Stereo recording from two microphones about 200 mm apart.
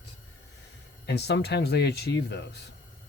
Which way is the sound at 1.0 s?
55° left (ahead or behind).